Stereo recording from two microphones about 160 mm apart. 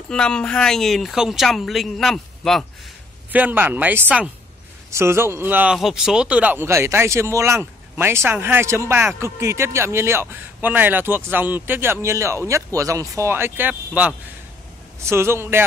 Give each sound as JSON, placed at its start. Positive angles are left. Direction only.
{"t": 0.1, "sound": "speech", "side_deg": 5}
{"t": 3.3, "sound": "a man's voice", "side_deg": -10}